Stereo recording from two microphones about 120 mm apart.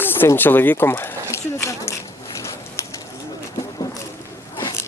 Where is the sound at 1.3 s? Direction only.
20° left (ahead or behind).